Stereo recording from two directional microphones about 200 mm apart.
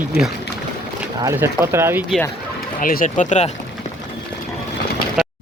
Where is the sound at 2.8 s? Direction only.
40° left (ahead or behind).